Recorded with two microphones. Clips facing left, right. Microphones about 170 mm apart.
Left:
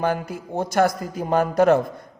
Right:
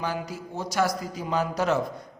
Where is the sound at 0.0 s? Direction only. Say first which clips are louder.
Left 7 dB; 55° left (ahead or behind).